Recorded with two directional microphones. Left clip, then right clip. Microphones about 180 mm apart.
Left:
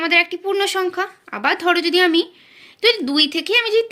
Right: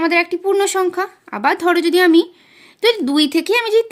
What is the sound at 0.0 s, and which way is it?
A woman's voice, 55° right (ahead or behind).